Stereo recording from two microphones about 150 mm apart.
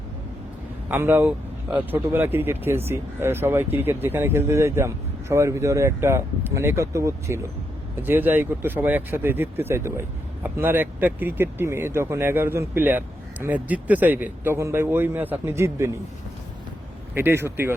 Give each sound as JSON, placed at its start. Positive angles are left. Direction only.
{"t": 0.9, "sound": "speech", "side_deg": -15}
{"t": 17.2, "sound": "speech", "side_deg": -15}